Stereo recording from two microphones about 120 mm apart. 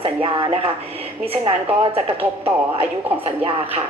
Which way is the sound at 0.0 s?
50° right (ahead or behind).